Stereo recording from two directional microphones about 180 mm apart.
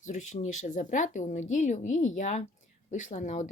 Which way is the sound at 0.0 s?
45° left (ahead or behind).